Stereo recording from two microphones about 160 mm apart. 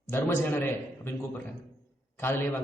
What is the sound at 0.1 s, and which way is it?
A man's voice, 15° left (ahead or behind).